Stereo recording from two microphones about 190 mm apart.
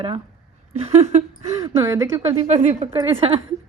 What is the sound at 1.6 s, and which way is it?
Speech, 15° right (ahead or behind).